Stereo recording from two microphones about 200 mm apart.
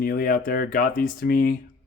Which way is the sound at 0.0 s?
45° left (ahead or behind).